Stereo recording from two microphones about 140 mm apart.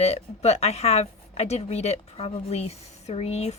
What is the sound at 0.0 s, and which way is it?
Speech, 50° left (ahead or behind).